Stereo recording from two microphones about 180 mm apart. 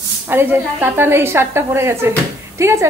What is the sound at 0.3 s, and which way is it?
A woman's voice, 10° right (ahead or behind).